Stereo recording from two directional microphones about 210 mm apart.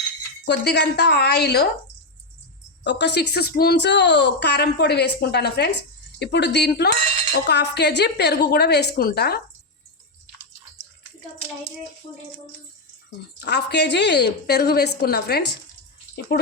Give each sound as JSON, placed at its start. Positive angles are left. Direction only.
{"t": 0.4, "sound": "a woman's voice", "side_deg": 50}
{"t": 2.8, "sound": "a woman's voice", "side_deg": 55}
{"t": 13.4, "sound": "a woman's voice", "side_deg": 55}